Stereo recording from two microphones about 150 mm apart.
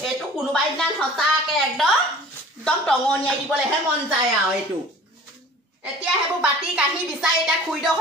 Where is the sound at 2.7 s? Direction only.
5° left (ahead or behind).